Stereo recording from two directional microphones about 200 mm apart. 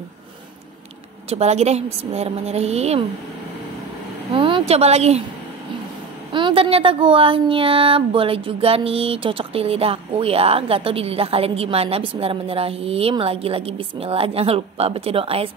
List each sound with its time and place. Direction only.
1.3 s a woman's voice: 35° right (ahead or behind)
4.3 s a woman's voice: 25° right (ahead or behind)
6.3 s a sound: 25° right (ahead or behind)